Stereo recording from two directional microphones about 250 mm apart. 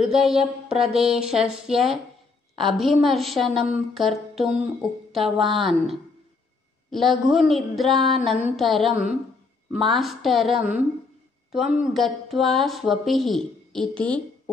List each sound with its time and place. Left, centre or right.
0.0 s speech: centre